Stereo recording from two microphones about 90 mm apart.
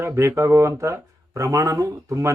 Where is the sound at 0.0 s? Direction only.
30° right (ahead or behind).